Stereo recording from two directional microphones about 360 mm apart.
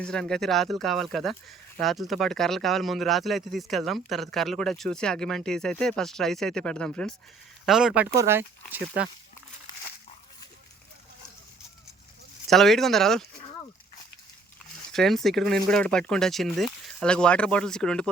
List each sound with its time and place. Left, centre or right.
0.0 s speech: centre
12.5 s speech: centre
14.9 s speech: centre